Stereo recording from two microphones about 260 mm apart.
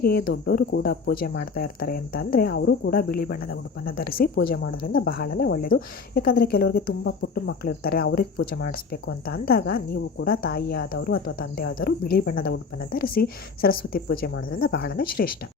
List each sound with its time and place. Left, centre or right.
0.0 s speech: left